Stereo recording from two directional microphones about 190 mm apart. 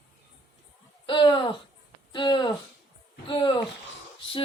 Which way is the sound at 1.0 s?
25° left (ahead or behind).